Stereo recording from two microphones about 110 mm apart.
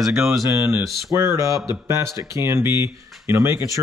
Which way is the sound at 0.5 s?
25° right (ahead or behind).